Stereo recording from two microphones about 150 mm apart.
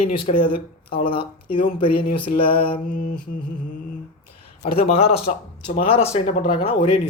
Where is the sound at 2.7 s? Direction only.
70° left (ahead or behind).